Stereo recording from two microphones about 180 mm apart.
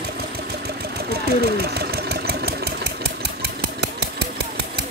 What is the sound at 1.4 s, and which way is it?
Engine, 60° right (ahead or behind).